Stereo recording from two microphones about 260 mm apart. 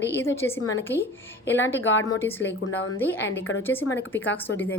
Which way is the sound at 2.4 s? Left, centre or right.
Left.